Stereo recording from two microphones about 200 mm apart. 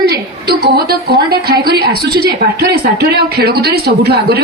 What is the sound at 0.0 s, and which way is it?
A woman's voice, 55° right (ahead or behind).